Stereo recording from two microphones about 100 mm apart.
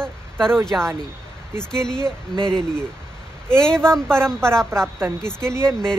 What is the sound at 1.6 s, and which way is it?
Speech, 5° left (ahead or behind).